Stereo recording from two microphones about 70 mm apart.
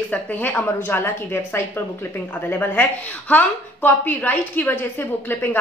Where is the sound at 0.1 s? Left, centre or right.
Left.